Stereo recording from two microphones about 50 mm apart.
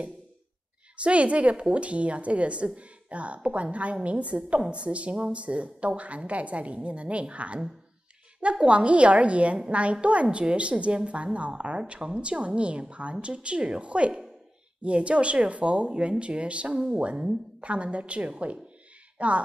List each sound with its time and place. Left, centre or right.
0.9 s a woman's voice: right